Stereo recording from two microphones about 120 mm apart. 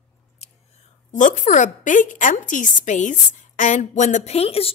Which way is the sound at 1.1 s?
90° left.